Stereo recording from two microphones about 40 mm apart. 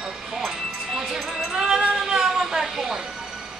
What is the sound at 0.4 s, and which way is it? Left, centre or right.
Music, centre.